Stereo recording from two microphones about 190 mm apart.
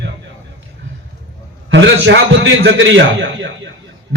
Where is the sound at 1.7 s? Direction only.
70° right (ahead or behind).